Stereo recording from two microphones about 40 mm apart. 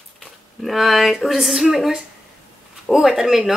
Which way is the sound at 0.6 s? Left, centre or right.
Centre.